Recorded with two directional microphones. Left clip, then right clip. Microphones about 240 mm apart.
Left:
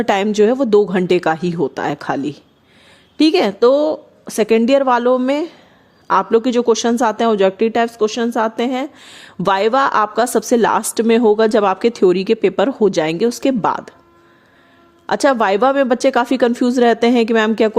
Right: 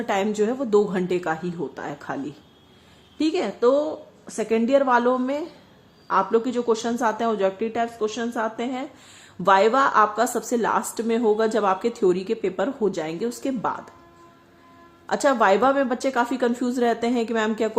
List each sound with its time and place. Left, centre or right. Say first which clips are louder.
0.0 s a woman's voice: left 9 dB; left
15.0 s a woman's voice: left 5 dB; left